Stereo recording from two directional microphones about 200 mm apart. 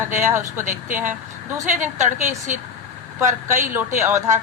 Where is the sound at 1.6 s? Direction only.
40° right (ahead or behind).